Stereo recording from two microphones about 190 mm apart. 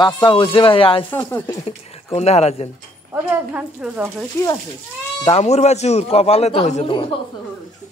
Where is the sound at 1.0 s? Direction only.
10° left (ahead or behind).